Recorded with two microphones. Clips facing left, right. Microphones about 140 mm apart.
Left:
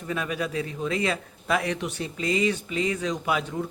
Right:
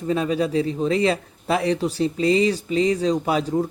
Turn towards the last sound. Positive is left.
turn(degrees=-35)  # may be behind; listen again after turning